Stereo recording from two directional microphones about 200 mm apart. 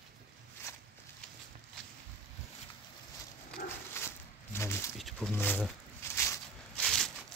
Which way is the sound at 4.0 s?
10° left (ahead or behind).